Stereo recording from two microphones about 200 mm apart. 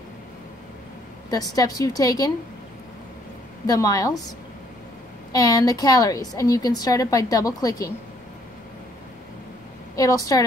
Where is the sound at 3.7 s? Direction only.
20° left (ahead or behind).